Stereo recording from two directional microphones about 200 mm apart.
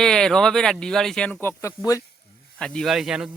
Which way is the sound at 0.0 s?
5° left (ahead or behind).